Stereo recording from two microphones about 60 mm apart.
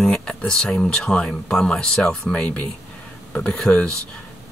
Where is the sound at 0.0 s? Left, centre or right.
Centre.